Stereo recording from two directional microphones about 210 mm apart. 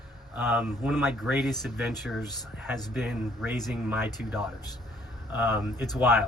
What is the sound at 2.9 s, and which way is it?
Speech, 5° right (ahead or behind).